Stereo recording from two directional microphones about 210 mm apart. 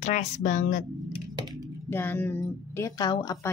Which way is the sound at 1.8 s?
10° left (ahead or behind).